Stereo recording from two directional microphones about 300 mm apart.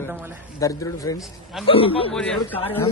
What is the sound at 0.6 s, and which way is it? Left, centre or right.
A man's voice, centre.